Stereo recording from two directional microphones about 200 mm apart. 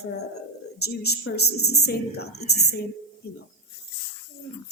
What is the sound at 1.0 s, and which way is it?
A woman's voice, 55° left (ahead or behind).